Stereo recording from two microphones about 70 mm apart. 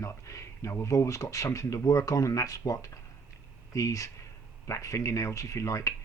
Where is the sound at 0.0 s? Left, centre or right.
Left.